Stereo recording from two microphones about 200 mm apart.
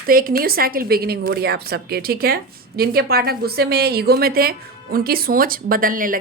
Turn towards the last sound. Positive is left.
turn(degrees=-45)  # may be behind; listen again after turning